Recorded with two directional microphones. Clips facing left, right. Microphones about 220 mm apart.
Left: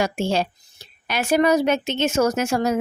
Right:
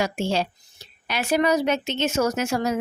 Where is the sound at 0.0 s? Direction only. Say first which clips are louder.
Left 2 dB; 50° left (ahead or behind).